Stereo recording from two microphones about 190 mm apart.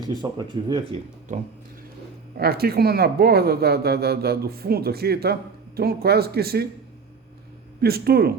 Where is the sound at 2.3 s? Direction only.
55° right (ahead or behind).